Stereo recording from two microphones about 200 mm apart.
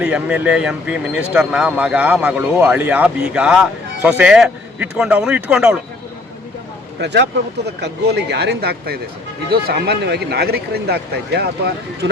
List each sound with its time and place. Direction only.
0.0 s speech: 5° right (ahead or behind)
7.0 s speech: 60° right (ahead or behind)